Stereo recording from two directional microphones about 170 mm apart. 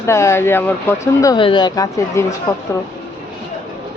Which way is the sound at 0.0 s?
15° left (ahead or behind).